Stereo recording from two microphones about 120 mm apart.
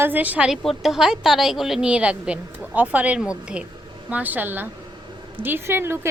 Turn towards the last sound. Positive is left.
turn(degrees=-20)  # may be behind; listen again after turning